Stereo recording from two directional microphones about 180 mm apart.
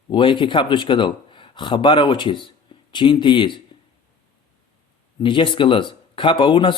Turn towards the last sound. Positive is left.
turn(degrees=25)  # may be behind; listen again after turning